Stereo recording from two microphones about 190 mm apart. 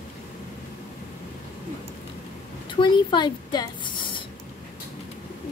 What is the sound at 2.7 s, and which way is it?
A woman's voice, 25° left (ahead or behind).